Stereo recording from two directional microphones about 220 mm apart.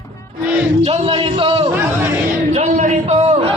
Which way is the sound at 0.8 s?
30° right (ahead or behind).